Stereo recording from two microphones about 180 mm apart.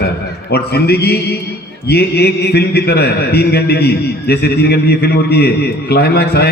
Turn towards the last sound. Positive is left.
turn(degrees=60)  # may be behind; listen again after turning